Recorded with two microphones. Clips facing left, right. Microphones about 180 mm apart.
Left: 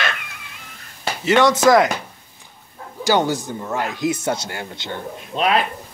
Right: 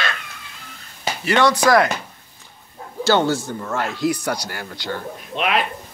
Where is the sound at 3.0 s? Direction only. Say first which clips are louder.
Right 1 dB; 15° left (ahead or behind).